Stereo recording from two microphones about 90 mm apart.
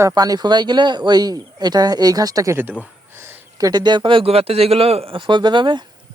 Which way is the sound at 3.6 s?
45° right (ahead or behind).